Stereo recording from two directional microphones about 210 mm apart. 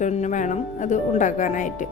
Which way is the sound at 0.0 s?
35° left (ahead or behind).